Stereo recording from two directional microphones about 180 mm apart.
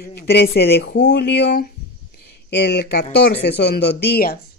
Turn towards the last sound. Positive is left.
turn(degrees=60)  # may be behind; listen again after turning